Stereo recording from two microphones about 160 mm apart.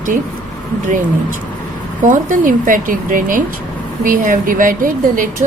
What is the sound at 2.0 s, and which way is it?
Speech, 55° right (ahead or behind).